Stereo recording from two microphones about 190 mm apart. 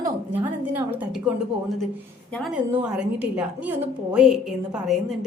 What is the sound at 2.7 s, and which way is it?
A woman's voice, 5° right (ahead or behind).